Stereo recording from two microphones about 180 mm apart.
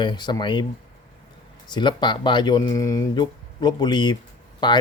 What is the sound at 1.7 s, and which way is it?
Speech, 25° left (ahead or behind).